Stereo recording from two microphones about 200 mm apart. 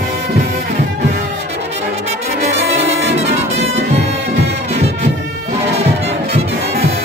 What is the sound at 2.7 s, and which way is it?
Brass instrument, 30° right (ahead or behind).